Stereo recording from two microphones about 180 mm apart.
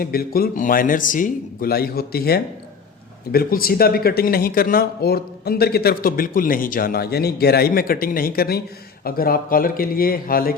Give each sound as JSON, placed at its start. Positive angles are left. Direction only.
{"t": 0.0, "sound": "speech", "side_deg": 55}